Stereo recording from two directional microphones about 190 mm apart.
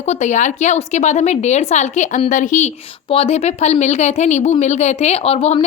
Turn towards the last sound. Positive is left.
turn(degrees=30)  # may be behind; listen again after turning